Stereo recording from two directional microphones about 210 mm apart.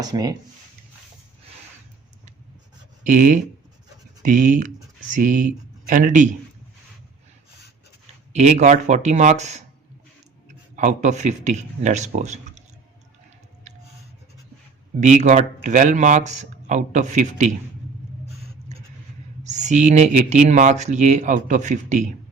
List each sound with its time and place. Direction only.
0.0 s speech: 20° right (ahead or behind)
3.0 s speech: 40° right (ahead or behind)
8.3 s speech: 35° right (ahead or behind)
10.8 s speech: 35° right (ahead or behind)
15.0 s speech: 35° right (ahead or behind)
19.4 s speech: 35° right (ahead or behind)